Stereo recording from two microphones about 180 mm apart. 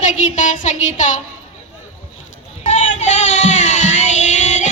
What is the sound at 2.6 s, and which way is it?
Music, 40° left (ahead or behind).